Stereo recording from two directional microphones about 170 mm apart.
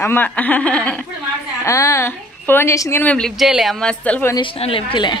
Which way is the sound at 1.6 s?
20° left (ahead or behind).